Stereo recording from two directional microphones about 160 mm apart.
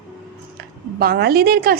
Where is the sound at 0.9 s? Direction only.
80° right.